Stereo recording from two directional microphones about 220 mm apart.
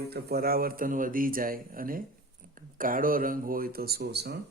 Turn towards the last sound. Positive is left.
turn(degrees=-50)  # may be behind; listen again after turning